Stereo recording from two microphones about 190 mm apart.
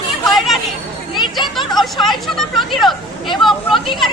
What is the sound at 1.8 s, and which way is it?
Speech, centre (ahead or behind).